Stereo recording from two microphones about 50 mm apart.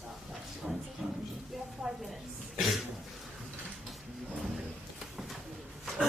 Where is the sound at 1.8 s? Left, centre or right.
Centre.